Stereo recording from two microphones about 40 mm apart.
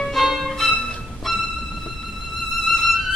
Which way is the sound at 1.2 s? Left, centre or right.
Centre.